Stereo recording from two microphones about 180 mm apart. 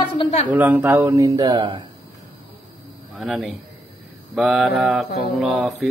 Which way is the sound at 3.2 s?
Centre (ahead or behind).